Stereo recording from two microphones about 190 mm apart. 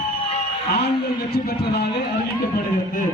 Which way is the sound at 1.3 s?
55° left (ahead or behind).